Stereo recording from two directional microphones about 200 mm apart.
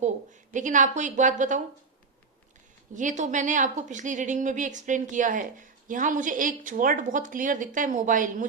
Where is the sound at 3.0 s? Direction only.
40° right (ahead or behind).